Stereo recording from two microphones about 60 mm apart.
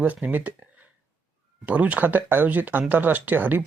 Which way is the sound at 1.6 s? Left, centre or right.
Right.